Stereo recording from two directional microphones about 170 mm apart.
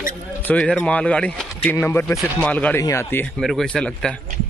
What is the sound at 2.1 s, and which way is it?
Speech, 10° right (ahead or behind).